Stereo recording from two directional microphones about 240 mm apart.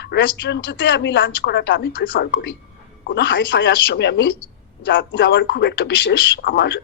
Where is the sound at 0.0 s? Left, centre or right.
Left.